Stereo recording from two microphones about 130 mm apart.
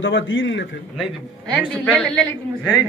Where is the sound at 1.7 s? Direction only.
5° left (ahead or behind).